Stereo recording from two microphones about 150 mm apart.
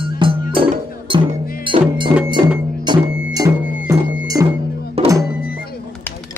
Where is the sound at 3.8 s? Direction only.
25° right (ahead or behind).